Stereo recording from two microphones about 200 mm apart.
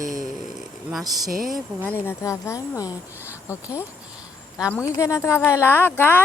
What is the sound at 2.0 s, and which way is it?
Speech, 15° left (ahead or behind).